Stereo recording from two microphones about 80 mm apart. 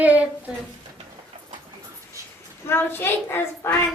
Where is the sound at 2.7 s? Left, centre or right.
Left.